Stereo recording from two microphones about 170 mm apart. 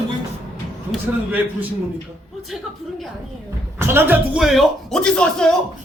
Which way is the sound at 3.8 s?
15° right (ahead or behind).